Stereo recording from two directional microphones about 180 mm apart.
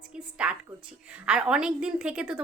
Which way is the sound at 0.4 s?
5° right (ahead or behind).